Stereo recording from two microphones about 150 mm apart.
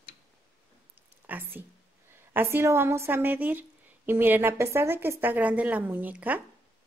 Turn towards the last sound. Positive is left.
turn(degrees=-10)  # may be behind; listen again after turning